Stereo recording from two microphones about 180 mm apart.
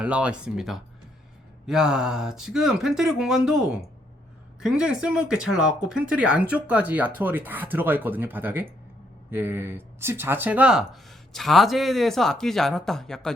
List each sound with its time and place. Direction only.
0.0 s speech: 5° right (ahead or behind)